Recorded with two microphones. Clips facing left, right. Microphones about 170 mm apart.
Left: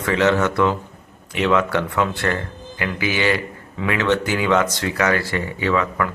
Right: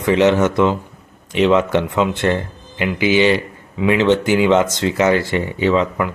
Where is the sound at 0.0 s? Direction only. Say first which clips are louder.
Right 4 dB; 20° right (ahead or behind).